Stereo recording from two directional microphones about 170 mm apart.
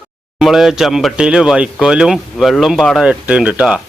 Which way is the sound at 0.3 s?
Centre (ahead or behind).